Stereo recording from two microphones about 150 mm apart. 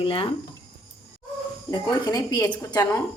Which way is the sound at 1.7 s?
30° left (ahead or behind).